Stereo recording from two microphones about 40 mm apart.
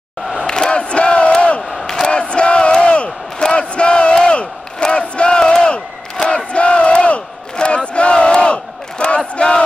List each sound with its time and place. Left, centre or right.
0.5 s crowd: left
1.9 s crowd: centre
4.9 s battle cry: left